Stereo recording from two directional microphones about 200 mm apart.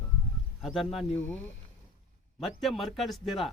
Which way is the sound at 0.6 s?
Centre (ahead or behind).